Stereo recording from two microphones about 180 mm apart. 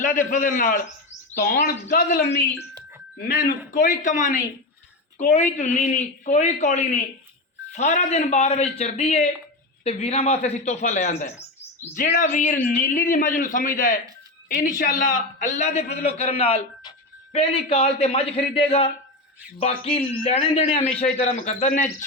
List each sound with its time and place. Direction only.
0.3 s a man's voice: 45° left (ahead or behind)
1.4 s speech: 55° left (ahead or behind)
3.2 s a man's voice: 50° left (ahead or behind)